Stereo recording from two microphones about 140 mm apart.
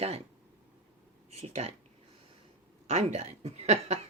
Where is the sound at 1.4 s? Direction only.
50° right (ahead or behind).